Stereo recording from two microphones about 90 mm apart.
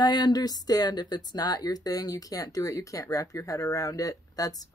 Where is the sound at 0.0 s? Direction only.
55° left (ahead or behind).